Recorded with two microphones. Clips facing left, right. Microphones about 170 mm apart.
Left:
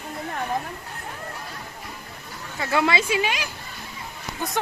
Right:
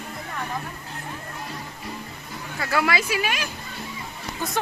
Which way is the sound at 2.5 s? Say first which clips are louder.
Left 1 dB; 25° left (ahead or behind).